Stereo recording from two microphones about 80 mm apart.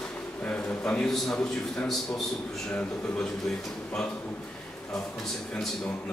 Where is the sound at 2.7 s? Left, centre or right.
Centre.